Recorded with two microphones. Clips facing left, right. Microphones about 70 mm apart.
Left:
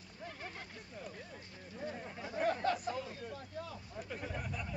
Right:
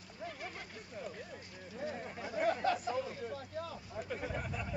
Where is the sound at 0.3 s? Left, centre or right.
Right.